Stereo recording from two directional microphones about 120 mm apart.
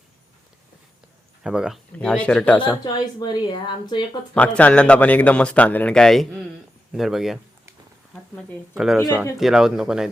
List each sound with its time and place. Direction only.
1.5 s speech: 5° right (ahead or behind)
2.0 s a man's voice: 5° left (ahead or behind)
2.8 s speech: 35° left (ahead or behind)
4.4 s a man's voice: 10° left (ahead or behind)